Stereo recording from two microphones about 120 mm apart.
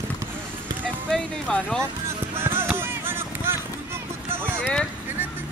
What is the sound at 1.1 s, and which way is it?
Speech, 10° left (ahead or behind).